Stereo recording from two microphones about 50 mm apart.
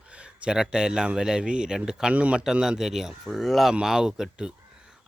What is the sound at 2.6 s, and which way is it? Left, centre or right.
Speech, centre.